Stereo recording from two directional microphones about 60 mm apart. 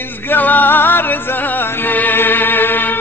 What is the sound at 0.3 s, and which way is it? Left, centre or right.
Music, left.